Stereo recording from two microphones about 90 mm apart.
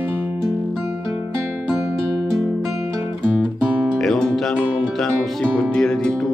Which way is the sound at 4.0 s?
5° left (ahead or behind).